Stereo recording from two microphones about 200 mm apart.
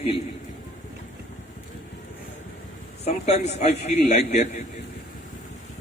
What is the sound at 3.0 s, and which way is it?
A man's voice, 35° left (ahead or behind).